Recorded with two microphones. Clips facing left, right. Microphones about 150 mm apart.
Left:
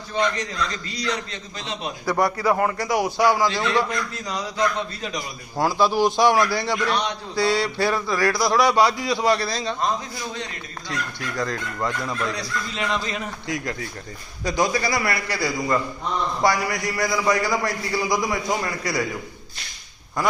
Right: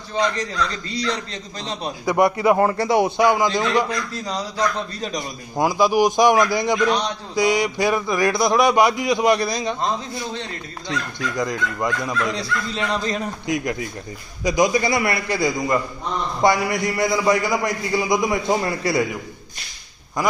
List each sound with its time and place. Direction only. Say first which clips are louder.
0.3 s a man's voice: right 3 dB; 35° right (ahead or behind)
2.0 s a man's voice: right 4 dB; 20° right (ahead or behind)
3.8 s a man's voice: right 2 dB; 35° right (ahead or behind)
5.5 s a man's voice: right 3 dB; 15° right (ahead or behind)
10.3 s a man's voice: right 2 dB; 30° right (ahead or behind)
11.3 s a man's voice: right 2 dB; 15° right (ahead or behind)
12.4 s a man's voice: right 3 dB; 35° right (ahead or behind)
13.5 s a man's voice: right 5 dB; 20° right (ahead or behind)